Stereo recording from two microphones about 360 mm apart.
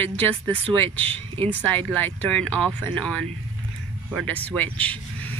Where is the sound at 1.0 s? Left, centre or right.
Centre.